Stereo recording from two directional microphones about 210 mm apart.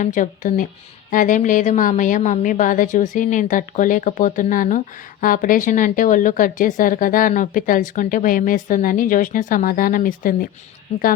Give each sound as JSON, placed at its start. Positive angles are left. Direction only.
{"t": 0.0, "sound": "speech", "side_deg": 35}